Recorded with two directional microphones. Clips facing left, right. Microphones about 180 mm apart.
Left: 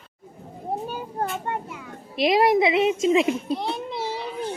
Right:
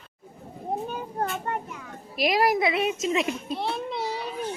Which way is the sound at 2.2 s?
25° left (ahead or behind).